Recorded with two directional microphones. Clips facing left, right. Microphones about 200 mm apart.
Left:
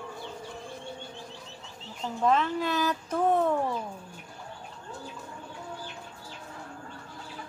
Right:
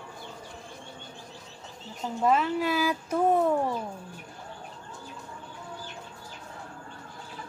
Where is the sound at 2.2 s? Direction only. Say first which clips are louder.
Right 1 dB; 10° right (ahead or behind).